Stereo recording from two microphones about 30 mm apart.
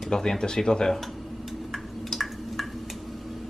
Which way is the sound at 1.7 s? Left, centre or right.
Centre.